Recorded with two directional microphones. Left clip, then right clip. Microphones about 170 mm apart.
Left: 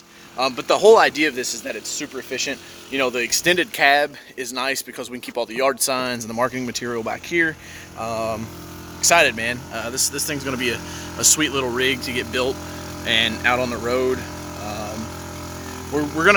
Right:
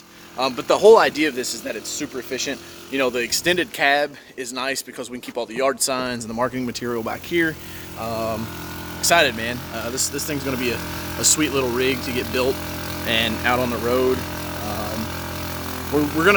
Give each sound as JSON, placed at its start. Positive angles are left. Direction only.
{"t": 0.3, "sound": "a man's voice", "side_deg": 5}
{"t": 3.4, "sound": "a man's voice", "side_deg": 35}